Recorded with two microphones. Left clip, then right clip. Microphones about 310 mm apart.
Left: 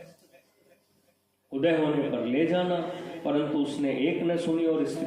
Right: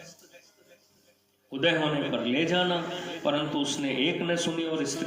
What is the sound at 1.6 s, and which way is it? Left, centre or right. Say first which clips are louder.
A man's voice: left 1 dB; right.